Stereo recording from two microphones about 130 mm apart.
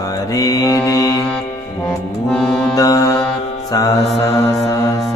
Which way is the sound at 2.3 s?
5° left (ahead or behind).